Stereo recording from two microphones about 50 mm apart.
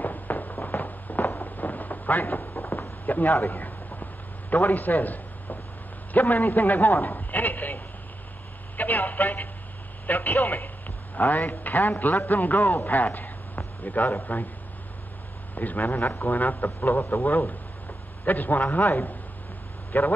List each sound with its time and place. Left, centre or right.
0.0 s fireworks: left
0.7 s a sound: left
6.1 s a man's voice: left
15.5 s a man's voice: left